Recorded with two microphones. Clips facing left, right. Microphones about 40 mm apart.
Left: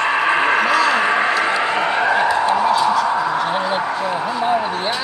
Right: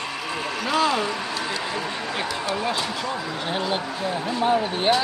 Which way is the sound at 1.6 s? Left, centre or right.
Left.